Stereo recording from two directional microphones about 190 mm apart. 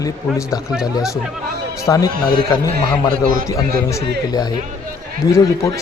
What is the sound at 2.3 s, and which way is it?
Music, 20° left (ahead or behind).